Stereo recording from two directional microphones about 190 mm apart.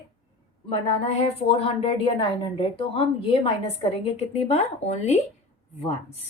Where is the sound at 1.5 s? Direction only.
30° left (ahead or behind).